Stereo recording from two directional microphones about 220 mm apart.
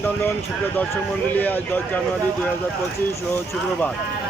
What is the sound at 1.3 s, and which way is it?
Speech, 10° left (ahead or behind).